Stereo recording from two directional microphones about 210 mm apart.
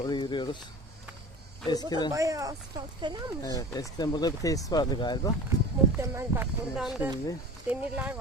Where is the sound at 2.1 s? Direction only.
15° right (ahead or behind).